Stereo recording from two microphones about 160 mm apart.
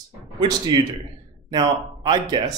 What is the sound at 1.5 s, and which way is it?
A man's voice, 25° right (ahead or behind).